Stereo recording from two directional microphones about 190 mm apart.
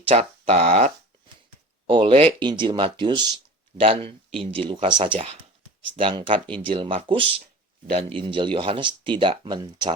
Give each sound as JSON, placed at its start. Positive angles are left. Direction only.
{"t": 0.1, "sound": "speech", "side_deg": -30}